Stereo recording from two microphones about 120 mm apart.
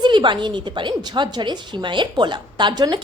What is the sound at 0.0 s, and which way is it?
A woman's voice, 40° right (ahead or behind).